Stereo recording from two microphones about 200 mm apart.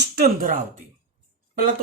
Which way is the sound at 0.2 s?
40° right (ahead or behind).